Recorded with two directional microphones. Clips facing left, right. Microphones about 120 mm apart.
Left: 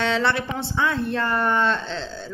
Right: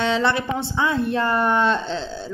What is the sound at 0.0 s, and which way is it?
Speech, centre (ahead or behind).